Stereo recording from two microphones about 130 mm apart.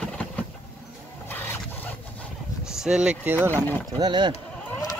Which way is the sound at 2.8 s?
5° right (ahead or behind).